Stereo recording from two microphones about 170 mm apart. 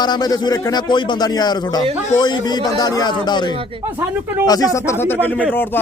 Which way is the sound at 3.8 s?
10° right (ahead or behind).